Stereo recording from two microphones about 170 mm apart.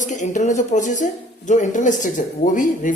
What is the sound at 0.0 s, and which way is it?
Speech, 45° left (ahead or behind).